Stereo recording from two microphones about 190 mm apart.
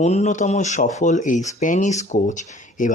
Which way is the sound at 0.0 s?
35° left (ahead or behind).